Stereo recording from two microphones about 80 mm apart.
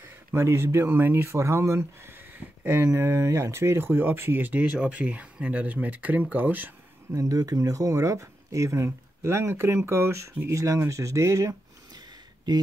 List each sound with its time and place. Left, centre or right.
0.3 s speech: right
7.1 s speech: right
12.5 s speech: right